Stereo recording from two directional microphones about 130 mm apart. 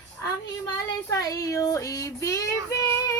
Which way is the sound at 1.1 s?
30° left (ahead or behind).